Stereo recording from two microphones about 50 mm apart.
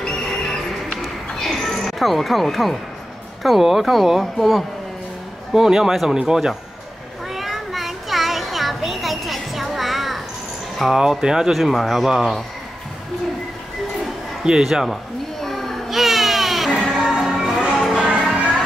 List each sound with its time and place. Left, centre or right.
1.0 s a sound: centre
3.4 s speech: centre
5.5 s speech: centre
7.3 s children playing: centre
10.8 s speech: centre
11.5 s speech: centre
14.4 s speech: centre
15.4 s baby cry: centre
16.7 s music: centre
17.9 s music: centre